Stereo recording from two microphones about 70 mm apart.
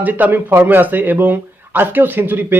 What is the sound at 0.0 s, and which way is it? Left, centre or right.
Speech, right.